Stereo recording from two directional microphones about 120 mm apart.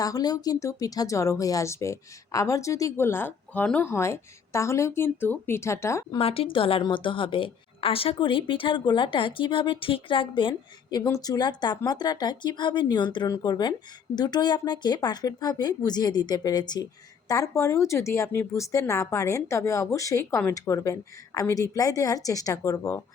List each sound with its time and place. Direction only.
0.0 s a woman's voice: 30° left (ahead or behind)
6.1 s a woman's voice: 50° left (ahead or behind)
10.9 s a woman's voice: 30° left (ahead or behind)